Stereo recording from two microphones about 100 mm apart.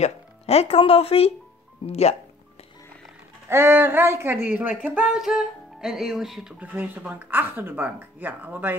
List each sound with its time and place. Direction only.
0.0 s speech: 90° left
3.4 s speech: 25° right (ahead or behind); by 6.5 s 5° right (ahead or behind)
6.6 s speech: 15° right (ahead or behind)